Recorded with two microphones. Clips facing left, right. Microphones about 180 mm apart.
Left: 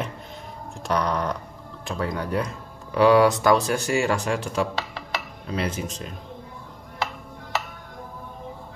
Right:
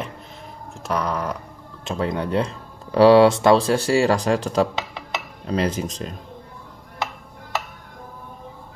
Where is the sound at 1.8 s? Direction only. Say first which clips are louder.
Right 4 dB; 20° right (ahead or behind).